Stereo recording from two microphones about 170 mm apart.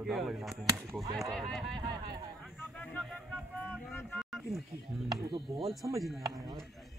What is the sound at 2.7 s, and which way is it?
Speech, 5° left (ahead or behind).